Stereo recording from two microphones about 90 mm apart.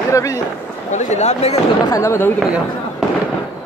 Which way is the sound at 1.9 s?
35° left (ahead or behind).